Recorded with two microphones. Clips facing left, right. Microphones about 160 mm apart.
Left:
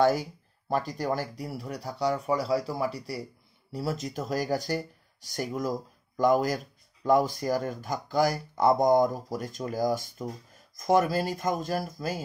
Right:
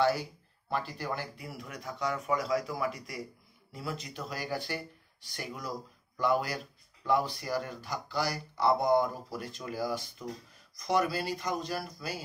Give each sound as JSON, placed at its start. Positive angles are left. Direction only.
{"t": 0.0, "sound": "speech", "side_deg": 45}